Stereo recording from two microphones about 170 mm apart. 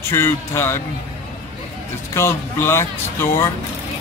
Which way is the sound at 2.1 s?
15° left (ahead or behind).